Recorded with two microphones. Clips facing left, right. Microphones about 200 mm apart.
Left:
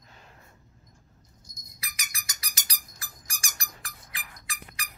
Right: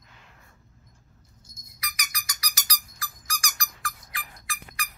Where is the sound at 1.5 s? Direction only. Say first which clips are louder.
Right 6 dB; 25° left (ahead or behind).